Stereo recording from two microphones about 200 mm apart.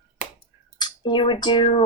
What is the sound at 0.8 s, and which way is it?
Speech, 20° left (ahead or behind).